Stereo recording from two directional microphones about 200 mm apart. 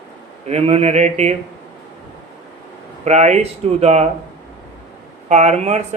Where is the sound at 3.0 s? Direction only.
35° right (ahead or behind).